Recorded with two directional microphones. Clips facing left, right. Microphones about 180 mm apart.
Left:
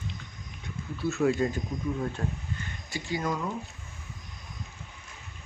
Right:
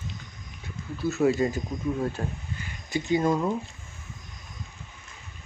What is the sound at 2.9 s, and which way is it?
Speech, 20° right (ahead or behind).